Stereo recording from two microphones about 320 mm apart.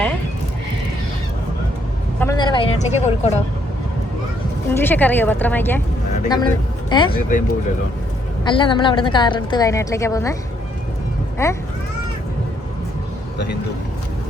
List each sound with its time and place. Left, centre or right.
2.1 s a sound: centre
4.7 s a woman's voice: centre
8.4 s a woman's voice: centre
11.4 s a woman's voice: centre